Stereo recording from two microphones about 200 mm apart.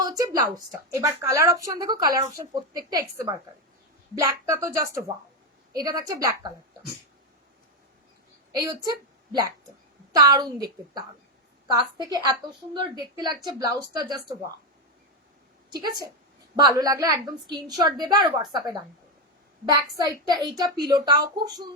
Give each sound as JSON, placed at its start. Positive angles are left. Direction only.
{"t": 0.0, "sound": "a woman's voice", "side_deg": -20}
{"t": 8.5, "sound": "a woman's voice", "side_deg": -20}
{"t": 10.1, "sound": "a woman's voice", "side_deg": -20}
{"t": 15.7, "sound": "a woman's voice", "side_deg": -20}
{"t": 20.0, "sound": "a woman's voice", "side_deg": -20}